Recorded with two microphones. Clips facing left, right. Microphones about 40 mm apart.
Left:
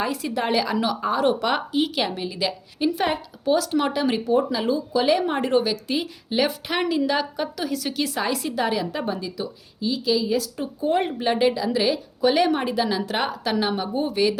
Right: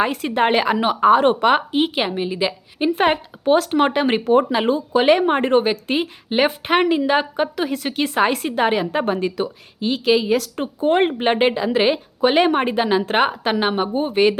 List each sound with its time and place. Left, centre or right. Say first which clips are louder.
0.0 s a woman's voice: right 6 dB; right
3.0 s a woman's voice: right 6 dB; right
4.3 s a woman's voice: right 6 dB; right